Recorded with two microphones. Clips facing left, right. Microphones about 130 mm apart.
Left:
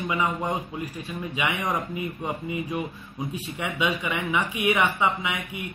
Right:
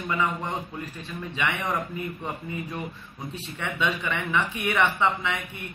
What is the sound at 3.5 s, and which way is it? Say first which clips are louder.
Speech: left 1 dB; 10° left (ahead or behind).